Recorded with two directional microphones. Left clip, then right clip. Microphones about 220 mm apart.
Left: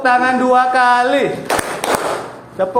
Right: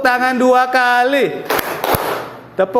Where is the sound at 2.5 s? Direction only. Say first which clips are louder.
Right 2 dB; 55° right (ahead or behind).